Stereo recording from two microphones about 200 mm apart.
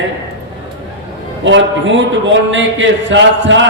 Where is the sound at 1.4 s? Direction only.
65° right (ahead or behind).